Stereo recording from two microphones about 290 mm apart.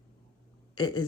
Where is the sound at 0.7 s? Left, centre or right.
Centre.